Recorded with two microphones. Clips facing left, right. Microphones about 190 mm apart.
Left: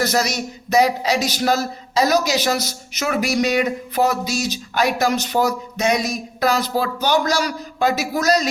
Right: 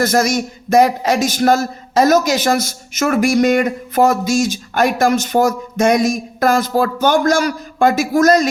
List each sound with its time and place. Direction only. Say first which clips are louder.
0.0 s speech: right 5 dB; 50° right (ahead or behind)